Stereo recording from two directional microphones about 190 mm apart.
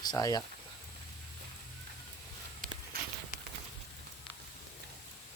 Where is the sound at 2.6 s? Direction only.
45° right (ahead or behind).